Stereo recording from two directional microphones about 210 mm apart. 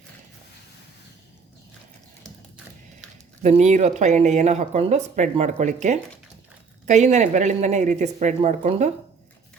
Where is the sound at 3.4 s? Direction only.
35° right (ahead or behind).